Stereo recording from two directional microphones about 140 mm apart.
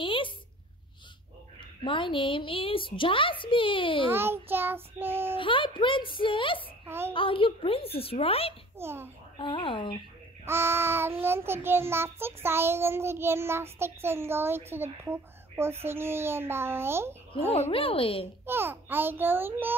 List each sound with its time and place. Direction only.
0.0 s a sound: 40° left (ahead or behind)
1.9 s a woman's voice: 35° left (ahead or behind)
4.1 s child singing: 15° right (ahead or behind)
5.4 s a woman's voice: 35° left (ahead or behind)
8.7 s child singing: 15° right (ahead or behind)
9.4 s a woman's voice: 35° left (ahead or behind)
10.4 s child singing: 15° right (ahead or behind)
17.5 s a woman's voice: 40° left (ahead or behind)
18.4 s child singing: 15° right (ahead or behind)